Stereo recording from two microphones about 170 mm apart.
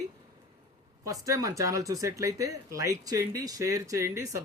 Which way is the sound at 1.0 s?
20° right (ahead or behind).